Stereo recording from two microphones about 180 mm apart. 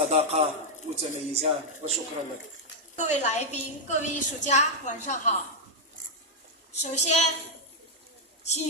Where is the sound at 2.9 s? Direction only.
40° left (ahead or behind).